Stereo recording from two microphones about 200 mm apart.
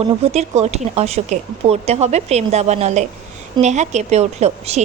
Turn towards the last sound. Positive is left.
turn(degrees=-35)  # may be behind; listen again after turning